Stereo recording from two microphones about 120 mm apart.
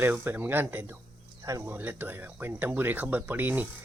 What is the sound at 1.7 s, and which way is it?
Speech, 15° right (ahead or behind).